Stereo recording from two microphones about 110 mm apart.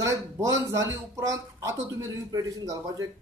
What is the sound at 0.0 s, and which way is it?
Speech, 30° right (ahead or behind).